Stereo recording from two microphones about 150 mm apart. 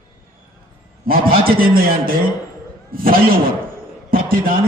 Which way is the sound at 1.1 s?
75° right (ahead or behind).